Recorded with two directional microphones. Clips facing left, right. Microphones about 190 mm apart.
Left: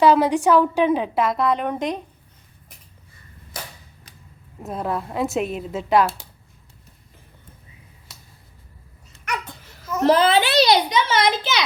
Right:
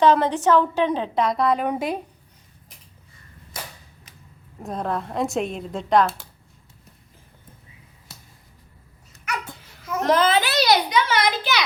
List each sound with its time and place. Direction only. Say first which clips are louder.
0.0 s a woman's voice: left 2 dB; 10° left (ahead or behind); by 2.0 s 10° right (ahead or behind)
4.6 s a woman's voice: left 1 dB; 5° left (ahead or behind)
10.0 s a child's voice: left 3 dB; 30° left (ahead or behind)